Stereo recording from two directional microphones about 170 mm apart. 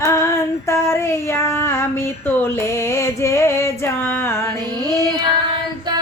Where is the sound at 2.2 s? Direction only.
15° left (ahead or behind).